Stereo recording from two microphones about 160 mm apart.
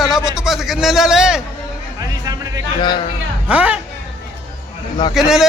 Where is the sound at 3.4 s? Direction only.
10° right (ahead or behind).